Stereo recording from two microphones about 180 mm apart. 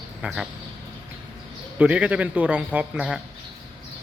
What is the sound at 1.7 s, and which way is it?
A man's voice, 5° right (ahead or behind).